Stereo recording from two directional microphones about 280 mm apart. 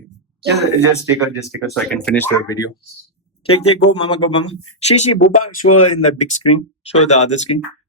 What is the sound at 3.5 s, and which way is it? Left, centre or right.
Speech, left.